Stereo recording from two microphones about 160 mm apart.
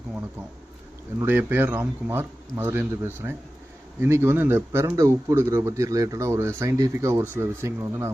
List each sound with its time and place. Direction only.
1.2 s speech: 10° right (ahead or behind)